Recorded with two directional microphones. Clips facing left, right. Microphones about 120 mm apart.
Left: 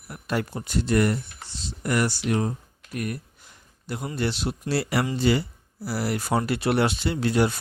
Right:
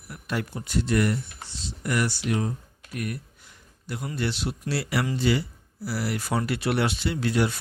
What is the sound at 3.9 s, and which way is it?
Speech, 35° left (ahead or behind).